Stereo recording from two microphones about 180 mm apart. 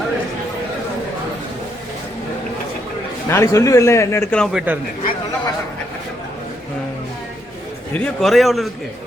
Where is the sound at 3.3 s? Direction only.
15° left (ahead or behind).